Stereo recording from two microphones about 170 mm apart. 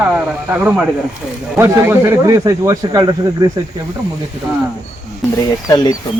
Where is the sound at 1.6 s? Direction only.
15° right (ahead or behind).